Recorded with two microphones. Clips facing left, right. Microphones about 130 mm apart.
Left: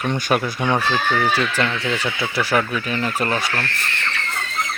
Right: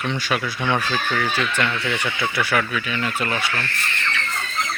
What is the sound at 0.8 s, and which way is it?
Speech, 30° left (ahead or behind).